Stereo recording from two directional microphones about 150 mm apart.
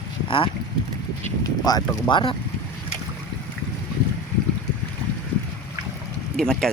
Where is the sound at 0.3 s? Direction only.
35° left (ahead or behind).